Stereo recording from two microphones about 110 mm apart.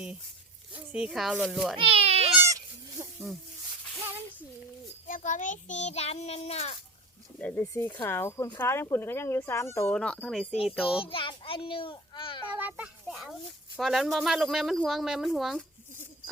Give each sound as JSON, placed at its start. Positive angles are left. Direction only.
{"t": 0.7, "sound": "speech", "side_deg": -10}
{"t": 1.7, "sound": "baby cry", "side_deg": -60}
{"t": 2.4, "sound": "goat", "side_deg": -30}
{"t": 5.7, "sound": "a child's voice", "side_deg": 80}
{"t": 7.3, "sound": "speech", "side_deg": 10}
{"t": 7.6, "sound": "speech", "side_deg": 25}
{"t": 9.9, "sound": "speech", "side_deg": 10}
{"t": 11.0, "sound": "a child's voice", "side_deg": 50}
{"t": 12.5, "sound": "a child's voice", "side_deg": -15}
{"t": 13.7, "sound": "speech", "side_deg": 0}